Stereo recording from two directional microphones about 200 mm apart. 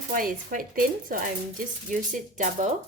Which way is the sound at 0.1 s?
45° right (ahead or behind).